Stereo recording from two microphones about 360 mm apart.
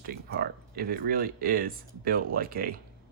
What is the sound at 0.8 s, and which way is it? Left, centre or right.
Speech, right.